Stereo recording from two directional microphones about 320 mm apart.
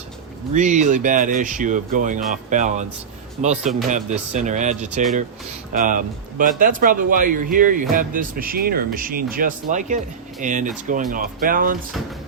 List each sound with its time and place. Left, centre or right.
0.5 s speech: right